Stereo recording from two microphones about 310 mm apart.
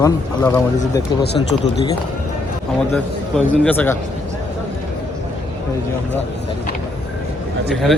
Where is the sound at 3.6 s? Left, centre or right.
Centre.